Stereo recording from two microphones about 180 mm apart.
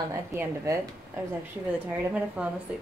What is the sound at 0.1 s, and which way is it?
Speech, 15° right (ahead or behind).